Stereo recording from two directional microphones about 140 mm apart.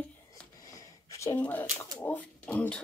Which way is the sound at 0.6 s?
25° left (ahead or behind).